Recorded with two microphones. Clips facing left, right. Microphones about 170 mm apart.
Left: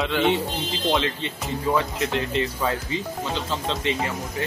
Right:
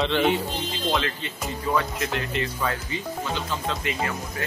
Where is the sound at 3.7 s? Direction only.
25° left (ahead or behind).